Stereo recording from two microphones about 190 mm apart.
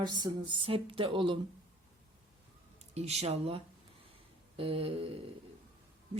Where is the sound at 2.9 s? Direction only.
35° right (ahead or behind).